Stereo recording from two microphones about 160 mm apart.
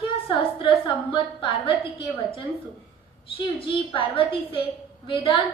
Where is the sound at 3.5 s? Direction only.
35° left (ahead or behind).